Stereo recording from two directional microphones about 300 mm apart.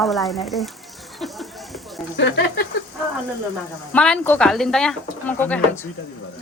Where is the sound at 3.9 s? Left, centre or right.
Centre.